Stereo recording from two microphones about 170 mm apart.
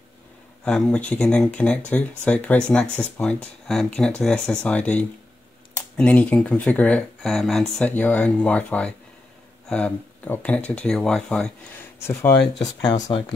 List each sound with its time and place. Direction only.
0.7 s speech: 5° left (ahead or behind)
12.1 s speech: 15° left (ahead or behind)